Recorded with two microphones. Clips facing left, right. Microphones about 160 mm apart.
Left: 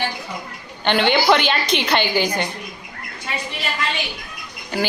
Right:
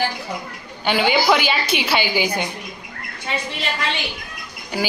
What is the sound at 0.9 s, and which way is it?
Speech, 5° right (ahead or behind).